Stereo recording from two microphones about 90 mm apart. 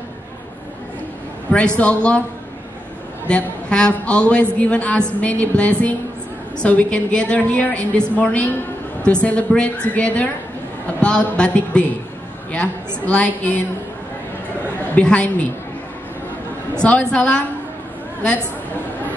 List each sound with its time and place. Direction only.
1.5 s a woman's voice: 10° left (ahead or behind)
3.3 s a woman's voice: 10° left (ahead or behind)
15.0 s a woman's voice: 15° left (ahead or behind)
16.7 s a woman's voice: 10° left (ahead or behind)